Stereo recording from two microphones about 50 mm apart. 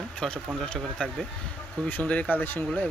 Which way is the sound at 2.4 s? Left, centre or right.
Left.